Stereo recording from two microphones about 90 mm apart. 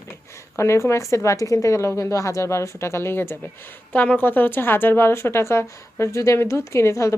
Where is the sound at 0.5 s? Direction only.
30° left (ahead or behind).